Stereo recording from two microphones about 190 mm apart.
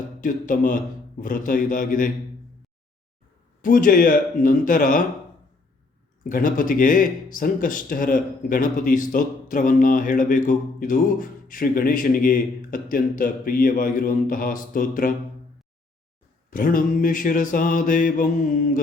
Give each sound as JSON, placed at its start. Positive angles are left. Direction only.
{"t": 0.2, "sound": "speech", "side_deg": 45}
{"t": 3.6, "sound": "speech", "side_deg": 45}
{"t": 6.2, "sound": "speech", "side_deg": 45}
{"t": 16.5, "sound": "speech", "side_deg": 45}